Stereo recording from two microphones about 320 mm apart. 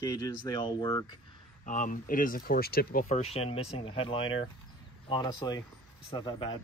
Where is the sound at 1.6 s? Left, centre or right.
Left.